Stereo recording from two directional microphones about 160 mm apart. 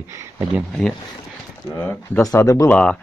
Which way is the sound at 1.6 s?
10° left (ahead or behind).